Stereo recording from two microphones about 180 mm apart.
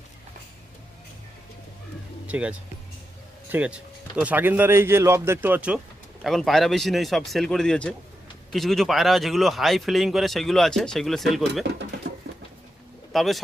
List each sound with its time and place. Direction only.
2.2 s speech: 5° right (ahead or behind)
13.1 s speech: centre (ahead or behind)